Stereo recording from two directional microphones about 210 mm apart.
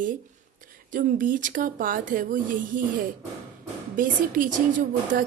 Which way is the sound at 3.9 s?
40° right (ahead or behind).